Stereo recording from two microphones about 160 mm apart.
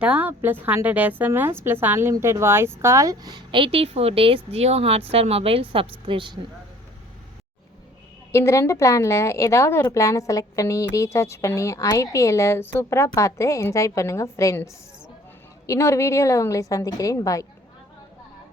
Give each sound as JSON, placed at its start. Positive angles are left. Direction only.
{"t": 0.0, "sound": "a woman's voice", "side_deg": -10}
{"t": 8.3, "sound": "a woman's voice", "side_deg": 20}